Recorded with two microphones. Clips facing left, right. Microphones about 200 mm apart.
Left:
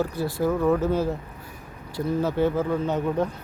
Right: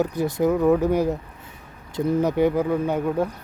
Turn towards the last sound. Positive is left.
turn(degrees=-10)  # may be behind; listen again after turning